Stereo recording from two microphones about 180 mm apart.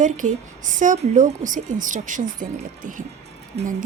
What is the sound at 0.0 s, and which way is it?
Speech, 45° right (ahead or behind).